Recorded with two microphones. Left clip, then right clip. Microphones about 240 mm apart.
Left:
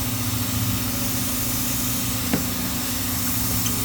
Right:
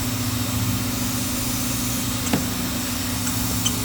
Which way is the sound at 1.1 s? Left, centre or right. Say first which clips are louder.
Right 1 dB; centre.